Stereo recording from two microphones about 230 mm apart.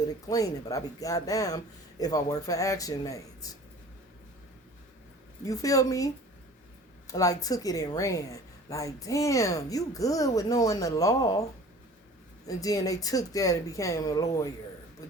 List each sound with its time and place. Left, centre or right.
0.3 s a woman's voice: centre
5.5 s a woman's voice: centre
7.1 s a woman's voice: centre
12.5 s a woman's voice: centre